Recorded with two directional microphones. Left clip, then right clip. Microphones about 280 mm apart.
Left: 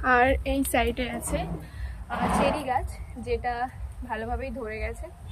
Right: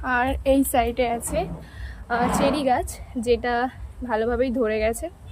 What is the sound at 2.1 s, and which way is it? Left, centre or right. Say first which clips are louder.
Speech: right 4 dB; right.